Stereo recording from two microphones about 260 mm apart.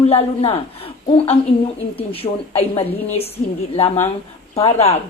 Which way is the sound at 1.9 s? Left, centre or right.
Left.